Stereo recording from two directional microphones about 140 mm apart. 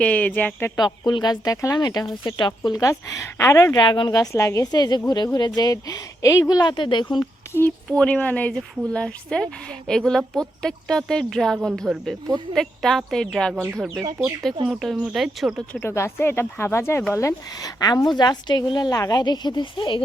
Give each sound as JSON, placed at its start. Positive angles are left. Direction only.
{"t": 0.0, "sound": "speech", "side_deg": 10}
{"t": 1.0, "sound": "speech", "side_deg": 30}
{"t": 7.4, "sound": "a sound", "side_deg": 20}
{"t": 7.9, "sound": "speech", "side_deg": 10}
{"t": 13.6, "sound": "speech", "side_deg": -15}
{"t": 14.7, "sound": "speech", "side_deg": 0}
{"t": 15.7, "sound": "speech", "side_deg": 15}